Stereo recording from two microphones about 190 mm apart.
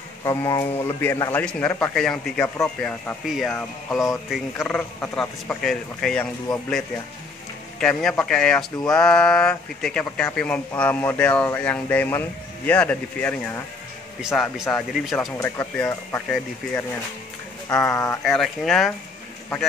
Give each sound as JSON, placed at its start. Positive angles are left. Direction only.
{"t": 0.2, "sound": "a man's voice", "side_deg": 15}
{"t": 7.8, "sound": "a man's voice", "side_deg": 5}
{"t": 14.6, "sound": "a man's voice", "side_deg": 10}
{"t": 17.8, "sound": "a man's voice", "side_deg": 15}
{"t": 18.2, "sound": "speech", "side_deg": 0}